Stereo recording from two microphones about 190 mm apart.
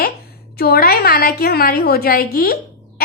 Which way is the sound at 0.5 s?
55° left (ahead or behind).